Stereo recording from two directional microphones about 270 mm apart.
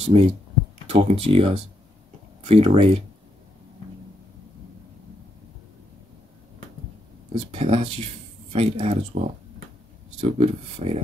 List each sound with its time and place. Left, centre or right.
0.0 s speech: right
7.5 s speech: right
10.3 s speech: right